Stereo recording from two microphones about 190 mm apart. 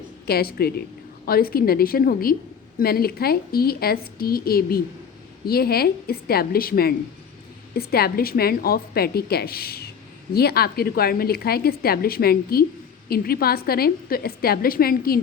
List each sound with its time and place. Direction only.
0.3 s a woman's voice: 55° left (ahead or behind)